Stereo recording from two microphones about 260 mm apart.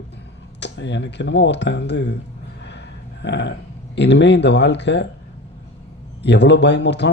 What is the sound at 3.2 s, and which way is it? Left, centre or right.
Speech, left.